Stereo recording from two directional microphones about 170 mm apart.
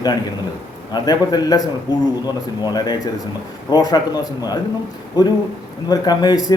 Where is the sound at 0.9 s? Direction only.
25° left (ahead or behind).